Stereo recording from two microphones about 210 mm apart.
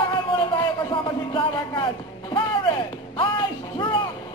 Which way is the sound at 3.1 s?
20° left (ahead or behind).